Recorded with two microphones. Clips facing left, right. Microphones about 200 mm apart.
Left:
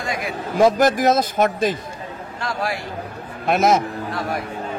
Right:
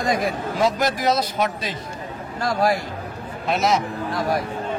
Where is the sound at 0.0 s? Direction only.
40° right (ahead or behind).